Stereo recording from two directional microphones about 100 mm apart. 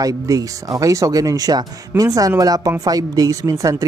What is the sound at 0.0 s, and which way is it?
Speech, 35° right (ahead or behind).